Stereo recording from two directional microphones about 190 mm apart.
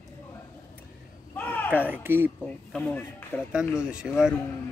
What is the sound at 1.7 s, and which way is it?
Speech, 10° right (ahead or behind).